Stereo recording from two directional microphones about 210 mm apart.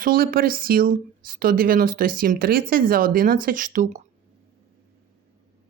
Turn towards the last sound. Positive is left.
turn(degrees=-35)  # may be behind; listen again after turning